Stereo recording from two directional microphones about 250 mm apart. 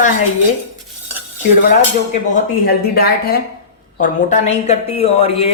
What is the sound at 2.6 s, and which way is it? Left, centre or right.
A man's voice, left.